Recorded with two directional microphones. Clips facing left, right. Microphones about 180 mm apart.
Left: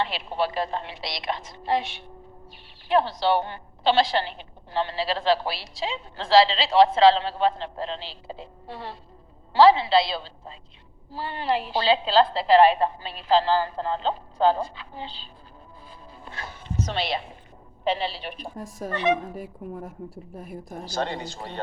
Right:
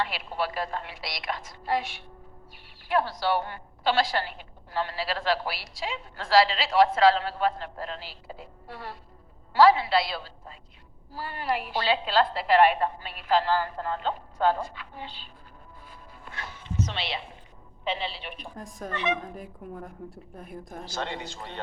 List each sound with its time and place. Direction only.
0.0 s a woman's voice: 25° left (ahead or behind)
15.9 s music: 30° left (ahead or behind)
16.5 s a man's voice: 45° left (ahead or behind)
18.5 s speech: centre (ahead or behind)
18.9 s a man's voice: 40° left (ahead or behind)
19.2 s speech: 5° left (ahead or behind)
20.8 s a man's voice: 35° left (ahead or behind)